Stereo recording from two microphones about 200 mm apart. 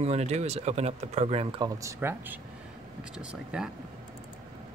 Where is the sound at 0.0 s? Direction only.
35° right (ahead or behind).